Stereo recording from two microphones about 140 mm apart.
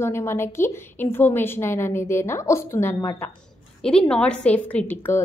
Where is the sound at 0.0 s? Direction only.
20° left (ahead or behind).